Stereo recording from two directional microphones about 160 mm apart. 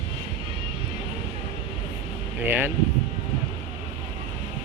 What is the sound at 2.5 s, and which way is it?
Speech, 10° right (ahead or behind).